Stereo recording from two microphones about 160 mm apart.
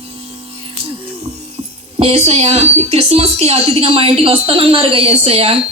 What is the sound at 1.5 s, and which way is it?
Speech, 40° right (ahead or behind).